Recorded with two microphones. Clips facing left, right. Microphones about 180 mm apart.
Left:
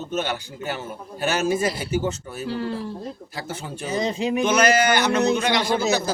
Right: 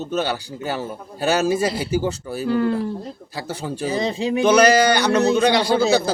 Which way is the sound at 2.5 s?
55° right (ahead or behind).